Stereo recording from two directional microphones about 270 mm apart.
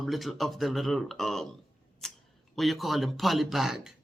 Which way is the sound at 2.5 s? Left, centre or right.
Centre.